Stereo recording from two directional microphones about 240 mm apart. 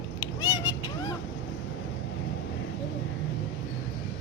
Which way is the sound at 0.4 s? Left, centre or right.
Centre.